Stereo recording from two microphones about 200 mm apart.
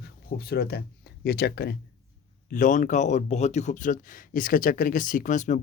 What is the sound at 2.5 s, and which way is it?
Speech, 40° left (ahead or behind).